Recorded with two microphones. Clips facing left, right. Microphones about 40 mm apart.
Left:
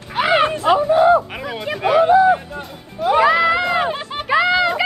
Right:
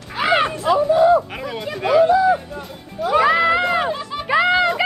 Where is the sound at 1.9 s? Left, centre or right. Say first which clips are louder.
Left 2 dB; left.